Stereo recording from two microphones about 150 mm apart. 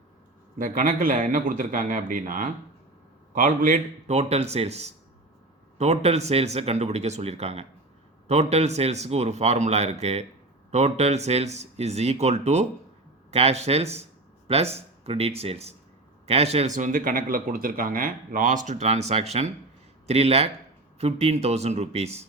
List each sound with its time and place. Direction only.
0.6 s speech: 65° right (ahead or behind); by 22.3 s 45° right (ahead or behind)